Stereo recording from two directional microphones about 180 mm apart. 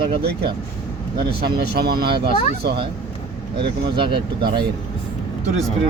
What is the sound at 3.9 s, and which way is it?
Speech, 25° right (ahead or behind).